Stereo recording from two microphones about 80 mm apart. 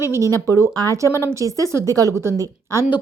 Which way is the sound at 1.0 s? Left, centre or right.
Left.